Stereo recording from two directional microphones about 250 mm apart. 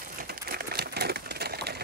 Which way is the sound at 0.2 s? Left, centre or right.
Right.